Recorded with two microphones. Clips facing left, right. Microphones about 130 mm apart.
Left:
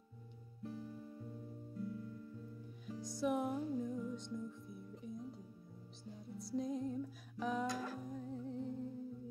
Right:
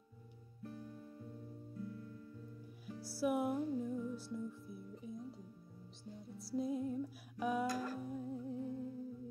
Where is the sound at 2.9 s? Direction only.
5° right (ahead or behind).